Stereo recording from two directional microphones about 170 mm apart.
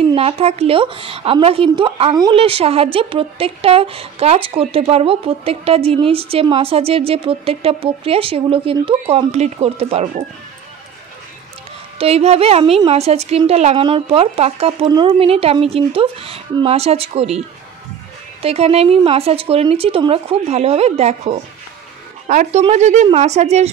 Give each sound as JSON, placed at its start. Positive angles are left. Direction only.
{"t": 0.1, "sound": "speech", "side_deg": -35}
{"t": 12.0, "sound": "speech", "side_deg": -35}
{"t": 18.4, "sound": "speech", "side_deg": -35}